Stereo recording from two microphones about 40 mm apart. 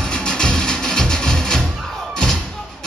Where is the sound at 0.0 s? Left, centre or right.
Centre.